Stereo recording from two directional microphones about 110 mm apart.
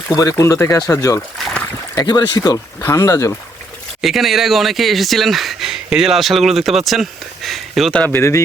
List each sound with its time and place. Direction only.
0.1 s speech: 30° left (ahead or behind)
2.0 s speech: 40° left (ahead or behind)
2.8 s speech: 25° left (ahead or behind)
4.0 s speech: centre (ahead or behind)
8.1 s speech: 25° left (ahead or behind)